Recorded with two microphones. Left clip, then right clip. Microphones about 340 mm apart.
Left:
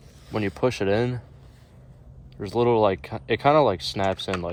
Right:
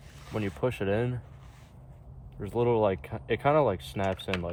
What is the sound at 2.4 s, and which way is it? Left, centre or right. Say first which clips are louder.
Speech: left 5 dB; left.